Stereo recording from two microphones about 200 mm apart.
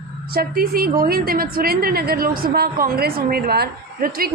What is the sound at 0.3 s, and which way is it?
A woman's voice, 50° right (ahead or behind).